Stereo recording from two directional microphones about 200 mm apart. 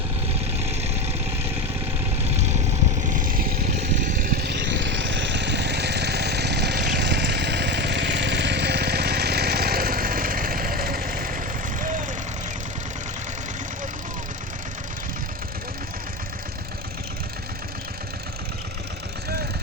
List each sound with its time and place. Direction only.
0.7 s vehicle: 30° right (ahead or behind)
3.2 s vehicle: 45° right (ahead or behind)
4.4 s vehicle: 60° right (ahead or behind); by 12.0 s 40° right (ahead or behind)